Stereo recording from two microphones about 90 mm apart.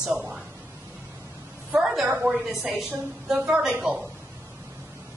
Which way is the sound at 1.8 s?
5° right (ahead or behind).